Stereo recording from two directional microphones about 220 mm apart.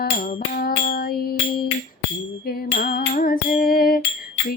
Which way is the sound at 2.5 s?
40° left (ahead or behind).